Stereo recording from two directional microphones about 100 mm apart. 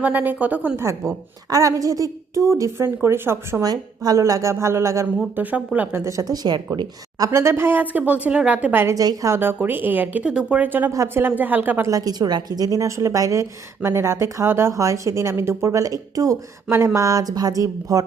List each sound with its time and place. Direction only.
0.0 s a woman's voice: 20° right (ahead or behind)
0.8 s a woman's voice: 30° right (ahead or behind)
3.6 s a woman's voice: 40° right (ahead or behind)
5.4 s a woman's voice: 15° right (ahead or behind)
6.1 s a woman's voice: 35° right (ahead or behind)
7.3 s a woman's voice: 30° right (ahead or behind)
9.0 s a woman's voice: 35° right (ahead or behind)
9.4 s a woman's voice: 20° right (ahead or behind)
11.9 s a woman's voice: 40° right (ahead or behind)